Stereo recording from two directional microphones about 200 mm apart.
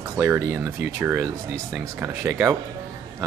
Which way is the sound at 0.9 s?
10° right (ahead or behind).